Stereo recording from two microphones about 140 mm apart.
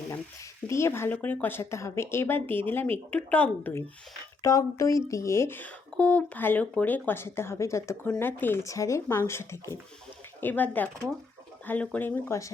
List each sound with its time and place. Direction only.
0.7 s speech: 20° left (ahead or behind)